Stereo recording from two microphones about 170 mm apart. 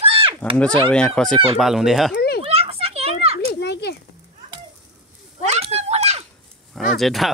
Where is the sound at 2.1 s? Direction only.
70° left (ahead or behind).